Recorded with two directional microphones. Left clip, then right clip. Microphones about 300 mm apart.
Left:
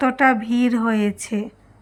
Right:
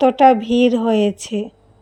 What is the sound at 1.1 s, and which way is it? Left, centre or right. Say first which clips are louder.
Speech: right 4 dB; left.